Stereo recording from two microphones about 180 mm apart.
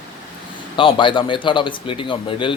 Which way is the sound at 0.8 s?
30° left (ahead or behind).